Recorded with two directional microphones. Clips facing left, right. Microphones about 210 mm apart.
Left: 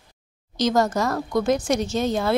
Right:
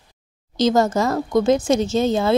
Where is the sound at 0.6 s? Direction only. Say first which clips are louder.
Right 3 dB; 25° right (ahead or behind).